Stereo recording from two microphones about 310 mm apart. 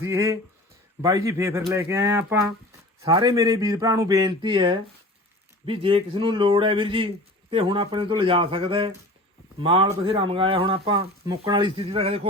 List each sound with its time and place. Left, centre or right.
0.0 s speech: centre